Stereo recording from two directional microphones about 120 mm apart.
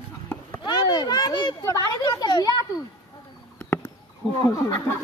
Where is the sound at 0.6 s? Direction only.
35° left (ahead or behind).